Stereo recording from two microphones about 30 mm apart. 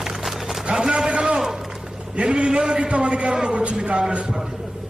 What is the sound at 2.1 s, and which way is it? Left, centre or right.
A man's voice, right.